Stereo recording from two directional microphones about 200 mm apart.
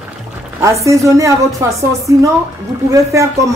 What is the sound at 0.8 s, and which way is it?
A woman's voice, 15° right (ahead or behind).